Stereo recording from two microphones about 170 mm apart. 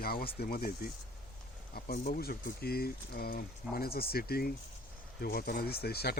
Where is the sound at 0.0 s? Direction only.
60° left (ahead or behind).